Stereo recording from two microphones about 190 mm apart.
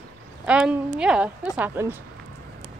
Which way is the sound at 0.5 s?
5° right (ahead or behind).